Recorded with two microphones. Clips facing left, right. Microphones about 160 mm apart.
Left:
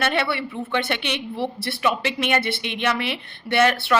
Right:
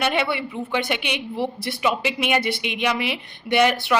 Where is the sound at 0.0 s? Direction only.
15° right (ahead or behind).